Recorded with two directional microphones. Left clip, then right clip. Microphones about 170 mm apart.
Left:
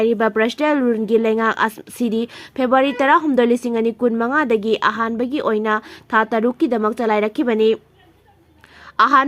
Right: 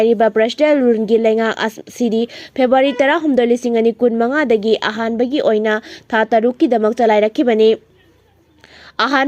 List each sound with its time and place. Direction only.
0.0 s speech: 10° right (ahead or behind)
9.0 s a woman's voice: 15° right (ahead or behind)